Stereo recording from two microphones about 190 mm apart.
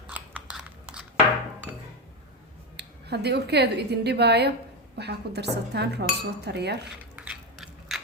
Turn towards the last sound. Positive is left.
turn(degrees=-5)  # may be behind; listen again after turning